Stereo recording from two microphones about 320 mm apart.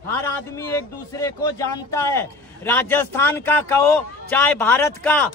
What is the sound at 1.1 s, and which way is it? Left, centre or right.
A man's voice, centre.